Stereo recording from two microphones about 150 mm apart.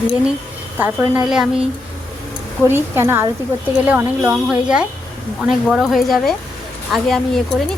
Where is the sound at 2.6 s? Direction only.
15° right (ahead or behind).